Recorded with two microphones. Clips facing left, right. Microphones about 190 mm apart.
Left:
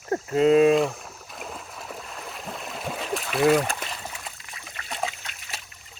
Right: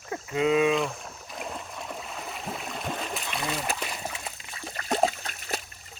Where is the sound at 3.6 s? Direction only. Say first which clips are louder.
Even; 10° right (ahead or behind).